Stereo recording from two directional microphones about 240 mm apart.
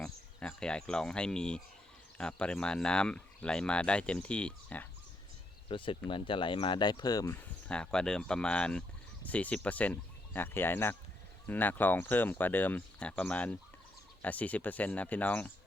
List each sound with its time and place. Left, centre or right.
0.0 s speech: centre
5.6 s speech: left
7.7 s speech: centre